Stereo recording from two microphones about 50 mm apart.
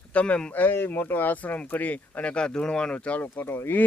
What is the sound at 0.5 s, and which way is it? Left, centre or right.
Speech, left.